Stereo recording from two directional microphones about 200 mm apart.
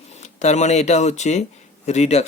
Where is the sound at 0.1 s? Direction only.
35° left (ahead or behind).